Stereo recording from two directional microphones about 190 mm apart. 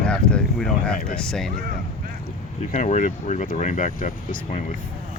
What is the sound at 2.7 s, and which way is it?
Speech, 40° left (ahead or behind).